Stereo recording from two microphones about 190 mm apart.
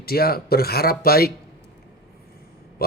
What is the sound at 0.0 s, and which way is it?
Speech, 55° left (ahead or behind).